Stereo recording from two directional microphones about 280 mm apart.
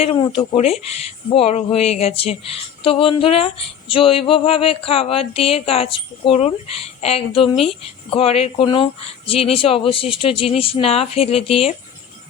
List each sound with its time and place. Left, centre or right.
0.0 s speech: centre